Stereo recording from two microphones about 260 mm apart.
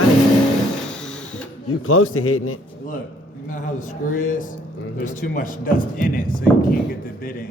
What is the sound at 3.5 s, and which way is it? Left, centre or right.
Speech, left.